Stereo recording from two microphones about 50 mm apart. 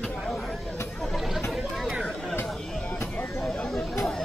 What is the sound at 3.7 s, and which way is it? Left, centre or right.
Chatter, centre.